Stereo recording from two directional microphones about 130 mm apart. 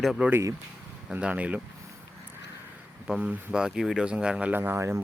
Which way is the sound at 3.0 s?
5° right (ahead or behind).